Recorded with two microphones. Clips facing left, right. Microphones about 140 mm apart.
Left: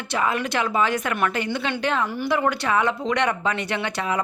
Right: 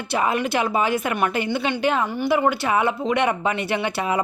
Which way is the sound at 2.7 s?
10° right (ahead or behind).